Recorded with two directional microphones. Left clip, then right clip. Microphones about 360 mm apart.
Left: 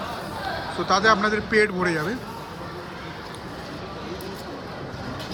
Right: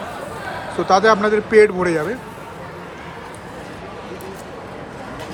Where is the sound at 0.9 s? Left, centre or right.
Centre.